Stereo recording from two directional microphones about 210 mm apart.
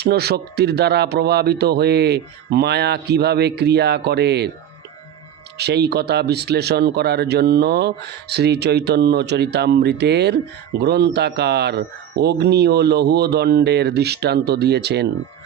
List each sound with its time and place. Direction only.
0.0 s speech: 50° right (ahead or behind)
5.5 s speech: 50° right (ahead or behind)